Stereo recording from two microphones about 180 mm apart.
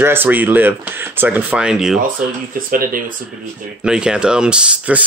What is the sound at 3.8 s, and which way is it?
Speech, 5° right (ahead or behind).